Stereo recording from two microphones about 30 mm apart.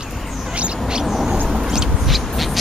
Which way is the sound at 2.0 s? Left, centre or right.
Centre.